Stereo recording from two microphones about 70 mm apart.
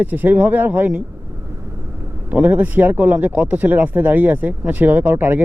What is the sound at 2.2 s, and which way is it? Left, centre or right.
Speech, right.